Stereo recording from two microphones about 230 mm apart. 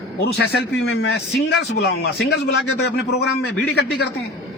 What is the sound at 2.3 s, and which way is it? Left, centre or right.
Speech, left.